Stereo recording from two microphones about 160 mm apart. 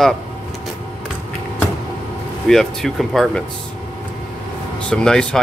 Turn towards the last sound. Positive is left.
turn(degrees=5)  # may be behind; listen again after turning